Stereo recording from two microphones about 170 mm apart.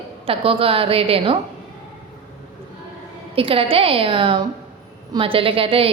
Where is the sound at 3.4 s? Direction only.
30° right (ahead or behind).